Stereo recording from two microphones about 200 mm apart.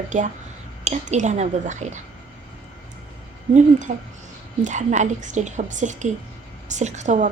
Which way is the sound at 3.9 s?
35° right (ahead or behind).